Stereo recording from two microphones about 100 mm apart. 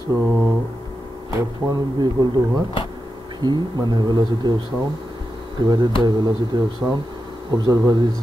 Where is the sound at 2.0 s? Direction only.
40° right (ahead or behind).